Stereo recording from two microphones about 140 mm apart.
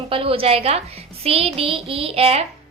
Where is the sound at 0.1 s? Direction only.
40° right (ahead or behind).